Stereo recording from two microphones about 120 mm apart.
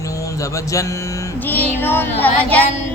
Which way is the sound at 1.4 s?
15° left (ahead or behind).